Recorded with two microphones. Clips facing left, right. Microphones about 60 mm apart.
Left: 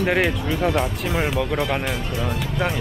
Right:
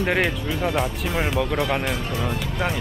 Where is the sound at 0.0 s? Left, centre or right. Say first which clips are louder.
Left 2 dB; centre.